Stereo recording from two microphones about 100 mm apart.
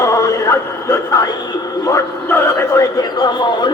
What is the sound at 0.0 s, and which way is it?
Music, 30° left (ahead or behind).